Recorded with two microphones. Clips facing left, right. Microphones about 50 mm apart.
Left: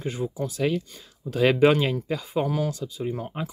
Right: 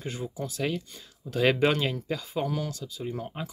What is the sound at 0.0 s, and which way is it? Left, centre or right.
Speech, centre.